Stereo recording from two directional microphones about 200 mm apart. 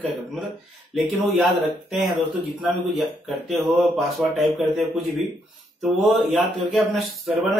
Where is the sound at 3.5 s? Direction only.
Centre (ahead or behind).